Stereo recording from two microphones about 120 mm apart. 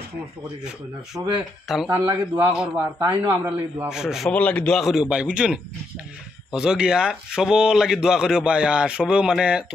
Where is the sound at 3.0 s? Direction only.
35° right (ahead or behind).